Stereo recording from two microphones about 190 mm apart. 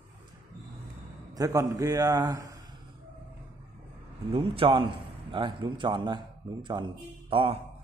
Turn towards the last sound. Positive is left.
turn(degrees=-30)  # may be behind; listen again after turning